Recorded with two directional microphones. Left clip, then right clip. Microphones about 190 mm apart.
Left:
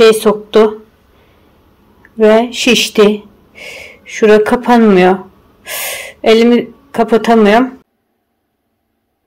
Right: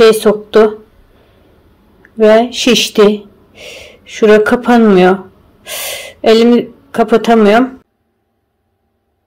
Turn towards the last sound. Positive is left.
turn(degrees=0)  # may be behind; listen again after turning